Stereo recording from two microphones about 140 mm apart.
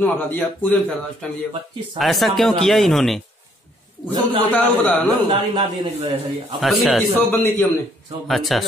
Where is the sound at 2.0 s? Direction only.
Centre (ahead or behind).